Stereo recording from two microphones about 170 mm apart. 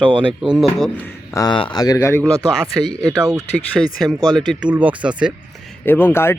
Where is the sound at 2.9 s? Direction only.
20° right (ahead or behind).